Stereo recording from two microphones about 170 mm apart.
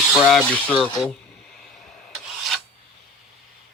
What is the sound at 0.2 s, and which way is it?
Speech, centre (ahead or behind).